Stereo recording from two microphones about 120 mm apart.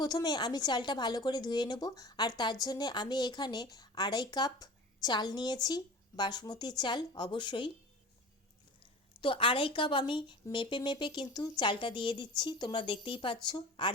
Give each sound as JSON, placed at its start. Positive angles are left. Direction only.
{"t": 0.0, "sound": "speech", "side_deg": 35}
{"t": 8.8, "sound": "a woman's voice", "side_deg": 45}